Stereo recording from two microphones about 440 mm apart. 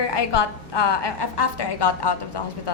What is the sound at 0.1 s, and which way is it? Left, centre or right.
A woman's voice, left.